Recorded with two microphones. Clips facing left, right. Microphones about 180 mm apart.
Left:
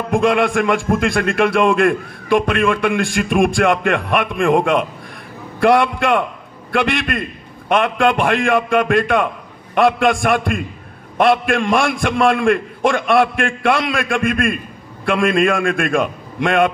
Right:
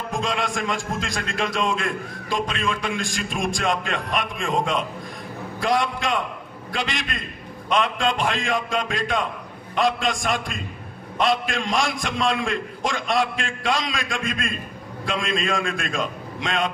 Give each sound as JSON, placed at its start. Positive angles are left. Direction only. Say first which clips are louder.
{"t": 0.1, "sound": "a man's voice", "louder": "left 12 dB", "side_deg": 60}